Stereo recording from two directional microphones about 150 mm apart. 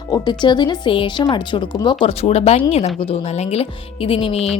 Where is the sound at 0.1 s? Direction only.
30° left (ahead or behind).